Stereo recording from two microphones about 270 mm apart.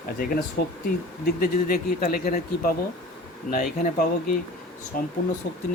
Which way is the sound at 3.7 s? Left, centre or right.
Left.